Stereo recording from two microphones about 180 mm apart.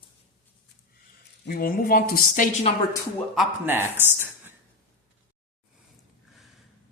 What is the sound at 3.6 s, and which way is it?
Speech, 10° right (ahead or behind).